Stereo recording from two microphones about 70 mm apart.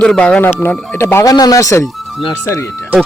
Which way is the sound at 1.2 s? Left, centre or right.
Left.